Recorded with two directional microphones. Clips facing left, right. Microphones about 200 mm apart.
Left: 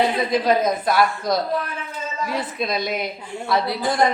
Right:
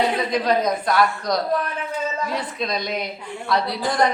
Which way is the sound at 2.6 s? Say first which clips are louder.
Left 3 dB; 5° left (ahead or behind).